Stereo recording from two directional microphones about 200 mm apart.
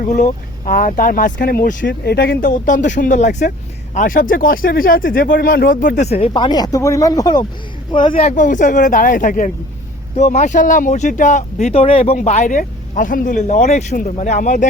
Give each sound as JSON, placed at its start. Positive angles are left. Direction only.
{"t": 0.0, "sound": "speech", "side_deg": 40}
{"t": 8.1, "sound": "speech", "side_deg": 40}